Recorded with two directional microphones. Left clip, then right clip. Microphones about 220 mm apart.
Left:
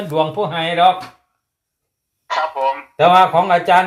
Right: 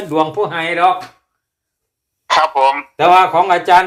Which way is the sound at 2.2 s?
35° right (ahead or behind).